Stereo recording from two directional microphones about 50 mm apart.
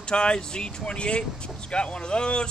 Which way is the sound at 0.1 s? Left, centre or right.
Centre.